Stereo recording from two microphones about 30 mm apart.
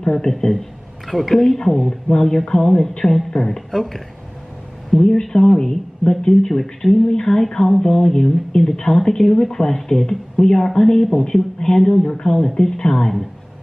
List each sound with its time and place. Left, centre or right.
0.0 s a man's voice: left
1.0 s speech: centre
1.6 s speech: centre
4.9 s speech: centre